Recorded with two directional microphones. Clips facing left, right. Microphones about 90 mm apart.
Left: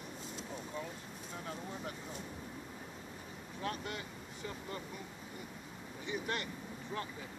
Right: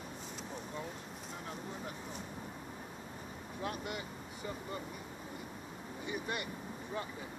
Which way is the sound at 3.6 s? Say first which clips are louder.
Even; 15° right (ahead or behind).